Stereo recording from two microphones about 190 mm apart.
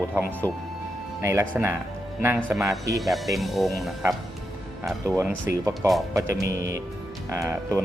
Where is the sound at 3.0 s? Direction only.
Centre (ahead or behind).